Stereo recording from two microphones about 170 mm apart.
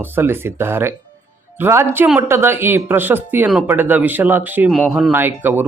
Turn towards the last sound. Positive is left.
turn(degrees=-10)  # may be behind; listen again after turning